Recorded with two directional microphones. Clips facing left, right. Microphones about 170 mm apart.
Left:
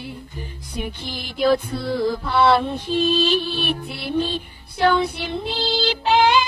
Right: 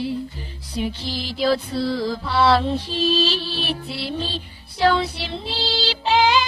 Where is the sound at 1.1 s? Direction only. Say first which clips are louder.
Left 3 dB; 55° left (ahead or behind).